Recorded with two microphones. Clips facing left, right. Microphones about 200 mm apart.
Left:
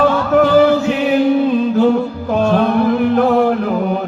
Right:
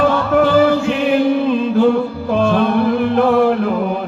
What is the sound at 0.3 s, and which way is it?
Music, 40° left (ahead or behind).